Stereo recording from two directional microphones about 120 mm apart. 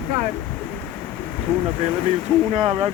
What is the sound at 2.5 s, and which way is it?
Speech, 55° right (ahead or behind).